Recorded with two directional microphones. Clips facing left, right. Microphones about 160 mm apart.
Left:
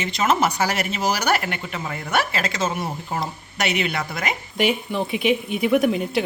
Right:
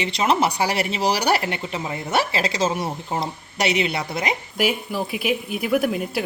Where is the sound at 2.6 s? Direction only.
30° right (ahead or behind).